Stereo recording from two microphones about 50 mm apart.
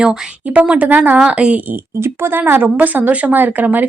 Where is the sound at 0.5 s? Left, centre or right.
Right.